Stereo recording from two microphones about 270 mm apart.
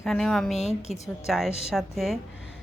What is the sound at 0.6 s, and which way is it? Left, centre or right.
Speech, left.